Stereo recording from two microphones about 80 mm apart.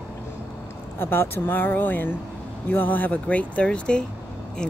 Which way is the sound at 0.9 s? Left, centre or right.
Left.